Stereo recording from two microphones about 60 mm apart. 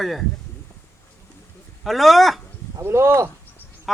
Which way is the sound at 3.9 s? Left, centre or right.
Centre.